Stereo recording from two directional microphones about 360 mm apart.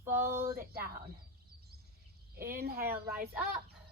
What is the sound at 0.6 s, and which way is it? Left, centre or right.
Speech, right.